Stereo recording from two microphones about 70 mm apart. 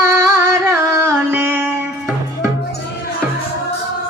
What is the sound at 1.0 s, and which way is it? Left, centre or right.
Music, right.